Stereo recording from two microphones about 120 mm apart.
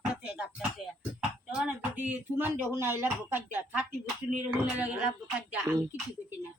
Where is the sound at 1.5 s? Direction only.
10° right (ahead or behind).